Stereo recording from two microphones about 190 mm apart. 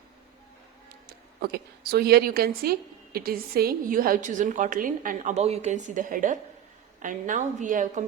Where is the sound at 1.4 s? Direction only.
55° right (ahead or behind).